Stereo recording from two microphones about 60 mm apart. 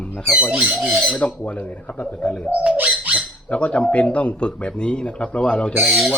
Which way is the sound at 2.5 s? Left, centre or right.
Centre.